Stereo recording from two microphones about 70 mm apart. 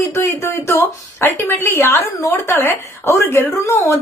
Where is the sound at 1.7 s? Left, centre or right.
Left.